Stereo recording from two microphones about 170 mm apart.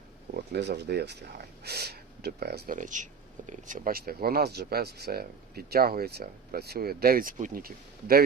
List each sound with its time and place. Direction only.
0.5 s speech: 75° right (ahead or behind)